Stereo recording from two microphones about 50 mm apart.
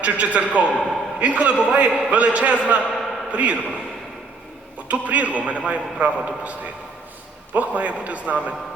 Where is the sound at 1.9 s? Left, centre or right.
Centre.